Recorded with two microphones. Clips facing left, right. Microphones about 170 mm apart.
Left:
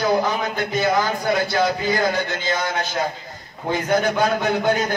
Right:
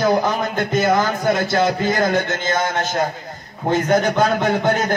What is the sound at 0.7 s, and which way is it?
Speech, 45° right (ahead or behind).